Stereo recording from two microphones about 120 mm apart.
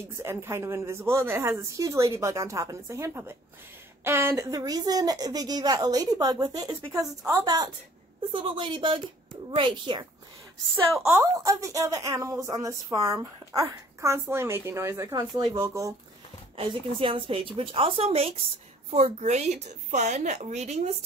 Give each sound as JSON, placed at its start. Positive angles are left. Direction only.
{"t": 0.1, "sound": "a woman's voice", "side_deg": -20}
{"t": 11.1, "sound": "a woman's voice", "side_deg": -25}
{"t": 16.5, "sound": "a woman's voice", "side_deg": -50}